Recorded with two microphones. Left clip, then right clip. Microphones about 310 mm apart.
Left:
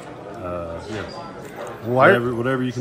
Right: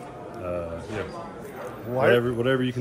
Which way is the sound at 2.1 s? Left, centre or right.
Centre.